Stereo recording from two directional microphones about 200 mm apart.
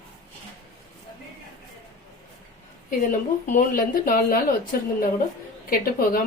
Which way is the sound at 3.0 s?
40° left (ahead or behind).